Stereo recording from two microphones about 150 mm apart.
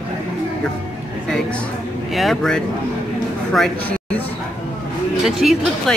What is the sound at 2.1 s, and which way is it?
Speech, centre (ahead or behind).